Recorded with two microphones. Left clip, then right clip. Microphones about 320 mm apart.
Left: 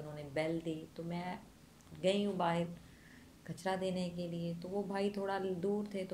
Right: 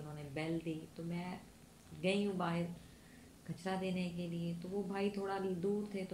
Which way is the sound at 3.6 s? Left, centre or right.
Left.